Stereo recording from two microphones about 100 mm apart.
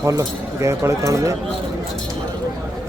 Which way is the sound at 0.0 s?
35° right (ahead or behind).